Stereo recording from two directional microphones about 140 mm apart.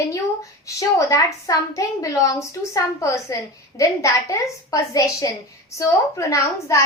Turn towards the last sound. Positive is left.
turn(degrees=20)  # may be behind; listen again after turning